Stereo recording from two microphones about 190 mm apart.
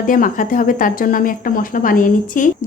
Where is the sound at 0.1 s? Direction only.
45° left (ahead or behind).